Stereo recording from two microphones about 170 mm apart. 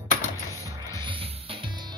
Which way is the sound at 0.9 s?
30° right (ahead or behind).